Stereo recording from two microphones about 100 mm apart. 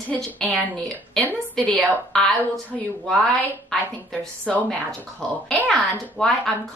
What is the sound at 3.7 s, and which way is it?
A woman's voice, 5° left (ahead or behind).